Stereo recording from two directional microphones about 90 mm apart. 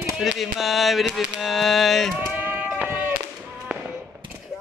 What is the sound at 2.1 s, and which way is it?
Sheep, 20° right (ahead or behind).